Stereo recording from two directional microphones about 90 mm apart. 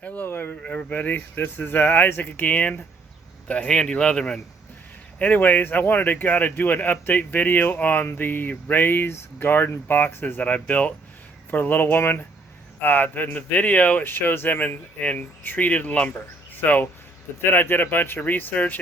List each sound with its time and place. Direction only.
0.0 s speech: 20° left (ahead or behind)